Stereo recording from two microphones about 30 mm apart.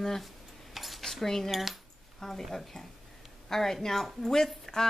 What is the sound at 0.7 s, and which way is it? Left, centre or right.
Cutlery, centre.